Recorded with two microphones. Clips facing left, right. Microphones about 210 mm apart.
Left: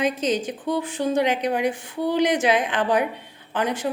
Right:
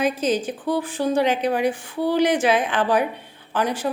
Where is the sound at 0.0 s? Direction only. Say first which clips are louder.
Right 1 dB; 20° left (ahead or behind).